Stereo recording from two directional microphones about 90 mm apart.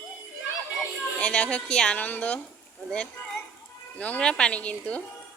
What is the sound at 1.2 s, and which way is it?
A woman's voice, 15° left (ahead or behind).